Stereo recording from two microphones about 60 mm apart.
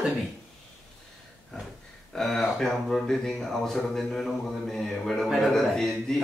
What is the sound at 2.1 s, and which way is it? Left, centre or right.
Speech, centre.